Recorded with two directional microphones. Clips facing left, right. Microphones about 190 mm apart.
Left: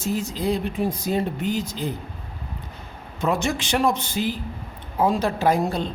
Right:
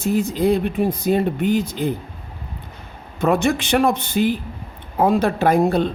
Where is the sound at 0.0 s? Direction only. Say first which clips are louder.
Right 6 dB; 60° right (ahead or behind).